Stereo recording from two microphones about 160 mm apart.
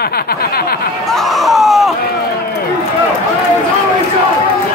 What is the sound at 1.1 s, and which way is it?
Speech, centre (ahead or behind).